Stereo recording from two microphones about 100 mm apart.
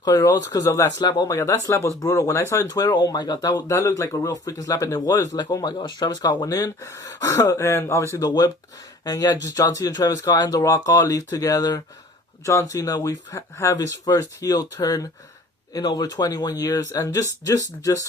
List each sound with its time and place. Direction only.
0.0 s speech: 40° left (ahead or behind)
0.9 s speech: 45° left (ahead or behind)
1.3 s speech: 30° left (ahead or behind)
2.6 s speech: 40° left (ahead or behind)
13.7 s speech: 40° left (ahead or behind)